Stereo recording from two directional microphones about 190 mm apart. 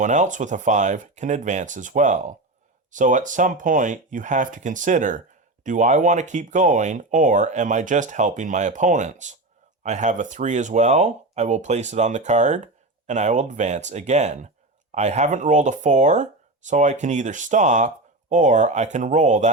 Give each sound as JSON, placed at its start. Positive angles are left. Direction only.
{"t": 0.0, "sound": "speech", "side_deg": -40}